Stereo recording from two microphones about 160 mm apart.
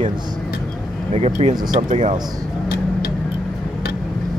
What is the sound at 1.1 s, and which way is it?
Speech, 40° right (ahead or behind).